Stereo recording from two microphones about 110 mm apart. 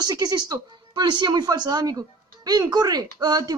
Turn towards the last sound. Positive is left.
turn(degrees=-35)  # may be behind; listen again after turning